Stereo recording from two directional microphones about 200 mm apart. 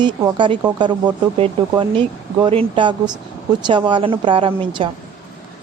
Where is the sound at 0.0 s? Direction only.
20° right (ahead or behind).